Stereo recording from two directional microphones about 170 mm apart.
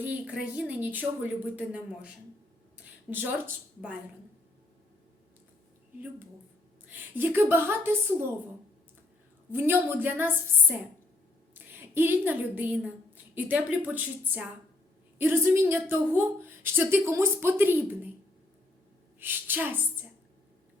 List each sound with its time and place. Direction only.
0.0 s a woman's voice: 10° right (ahead or behind)
6.9 s a woman's voice: 10° right (ahead or behind)
9.5 s a woman's voice: 10° right (ahead or behind)
11.5 s a sound: 10° right (ahead or behind)
13.3 s a woman's voice: 10° right (ahead or behind)
19.2 s a woman's voice: 10° right (ahead or behind)